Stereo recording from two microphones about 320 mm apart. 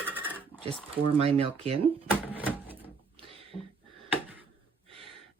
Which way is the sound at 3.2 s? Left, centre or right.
Centre.